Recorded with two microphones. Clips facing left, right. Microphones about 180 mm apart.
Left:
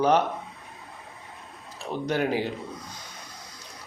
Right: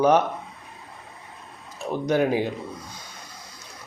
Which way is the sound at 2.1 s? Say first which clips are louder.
Right 4 dB; 15° right (ahead or behind).